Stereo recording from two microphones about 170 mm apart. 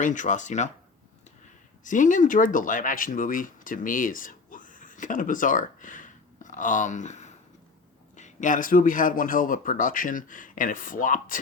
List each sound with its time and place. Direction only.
0.0 s a man's voice: 50° left (ahead or behind)
1.8 s a man's voice: 50° left (ahead or behind)